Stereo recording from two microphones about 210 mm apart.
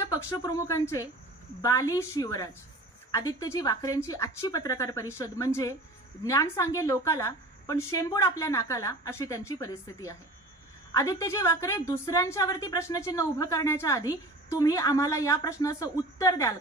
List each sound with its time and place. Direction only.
0.1 s a woman's voice: 20° left (ahead or behind)